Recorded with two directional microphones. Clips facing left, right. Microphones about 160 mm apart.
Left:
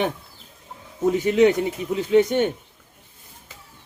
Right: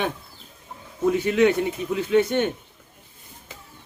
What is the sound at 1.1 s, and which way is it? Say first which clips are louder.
A man's voice: left 2 dB; 20° left (ahead or behind).